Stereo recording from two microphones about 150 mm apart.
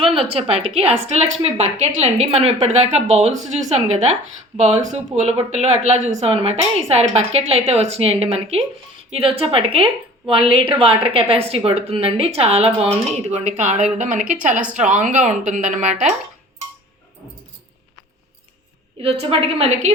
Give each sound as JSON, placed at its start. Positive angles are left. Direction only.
{"t": 0.0, "sound": "a woman's voice", "side_deg": -35}
{"t": 19.2, "sound": "a woman's voice", "side_deg": -40}